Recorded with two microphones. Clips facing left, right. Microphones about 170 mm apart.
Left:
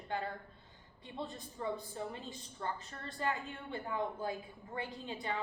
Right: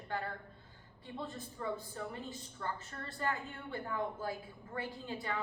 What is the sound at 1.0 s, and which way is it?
A woman's voice, 20° left (ahead or behind).